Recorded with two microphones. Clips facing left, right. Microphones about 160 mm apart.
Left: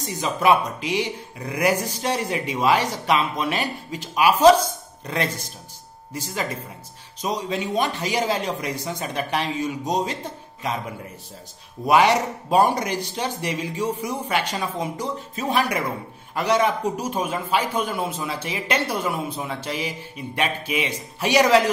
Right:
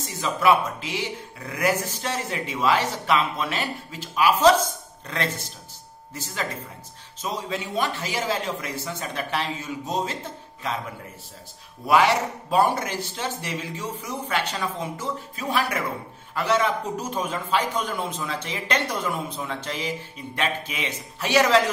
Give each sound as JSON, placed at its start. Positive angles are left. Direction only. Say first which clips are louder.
{"t": 0.2, "sound": "a man's voice", "louder": "left 1 dB", "side_deg": 20}